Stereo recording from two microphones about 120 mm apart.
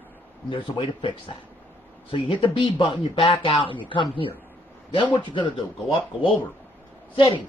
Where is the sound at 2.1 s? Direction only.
45° left (ahead or behind).